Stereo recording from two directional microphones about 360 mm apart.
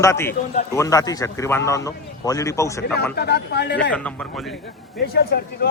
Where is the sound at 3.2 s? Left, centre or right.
Left.